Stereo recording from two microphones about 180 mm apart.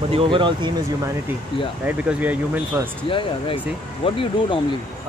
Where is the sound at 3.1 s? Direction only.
30° left (ahead or behind).